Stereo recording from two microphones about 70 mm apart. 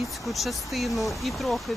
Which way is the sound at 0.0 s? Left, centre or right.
Centre.